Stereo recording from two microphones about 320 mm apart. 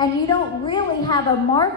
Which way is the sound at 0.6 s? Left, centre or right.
Centre.